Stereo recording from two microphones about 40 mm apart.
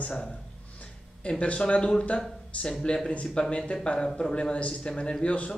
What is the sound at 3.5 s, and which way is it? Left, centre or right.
A man's voice, left.